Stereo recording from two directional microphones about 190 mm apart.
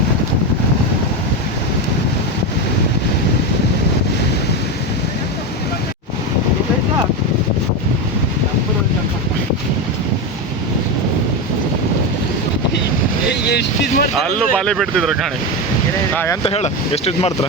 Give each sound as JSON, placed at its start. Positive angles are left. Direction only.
{"t": 13.5, "sound": "vehicle", "side_deg": 60}
{"t": 14.2, "sound": "speech", "side_deg": 5}
{"t": 16.1, "sound": "speech", "side_deg": 10}
{"t": 16.4, "sound": "speech", "side_deg": 30}